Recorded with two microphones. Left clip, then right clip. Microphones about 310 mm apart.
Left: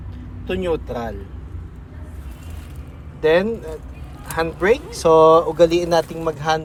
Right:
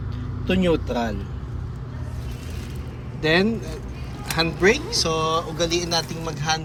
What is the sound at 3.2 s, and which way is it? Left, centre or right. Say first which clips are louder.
Speech: left 4 dB; centre.